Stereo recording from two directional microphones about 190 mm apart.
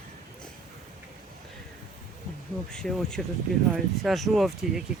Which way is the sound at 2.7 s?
5° left (ahead or behind).